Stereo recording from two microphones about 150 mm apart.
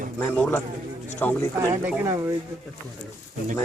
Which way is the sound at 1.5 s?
20° right (ahead or behind).